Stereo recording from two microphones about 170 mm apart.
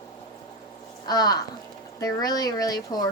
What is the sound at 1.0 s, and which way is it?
A woman's voice, 25° left (ahead or behind).